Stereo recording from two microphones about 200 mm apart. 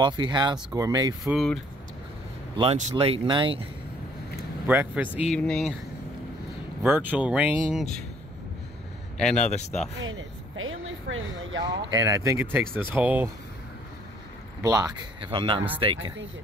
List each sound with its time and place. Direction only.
0.0 s speech: 20° right (ahead or behind)
1.2 s speech: centre (ahead or behind)
2.5 s speech: 25° right (ahead or behind)
4.6 s speech: 5° right (ahead or behind)
5.3 s speech: 5° left (ahead or behind)
6.8 s speech: 10° right (ahead or behind)
9.2 s speech: 5° left (ahead or behind)
9.9 s a sound: 80° right
11.6 s speech: 20° right (ahead or behind)
14.6 s speech: 15° right (ahead or behind)